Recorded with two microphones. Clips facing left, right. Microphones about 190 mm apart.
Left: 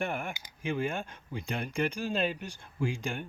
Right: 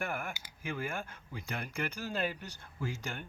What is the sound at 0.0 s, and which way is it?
Speech, 25° left (ahead or behind).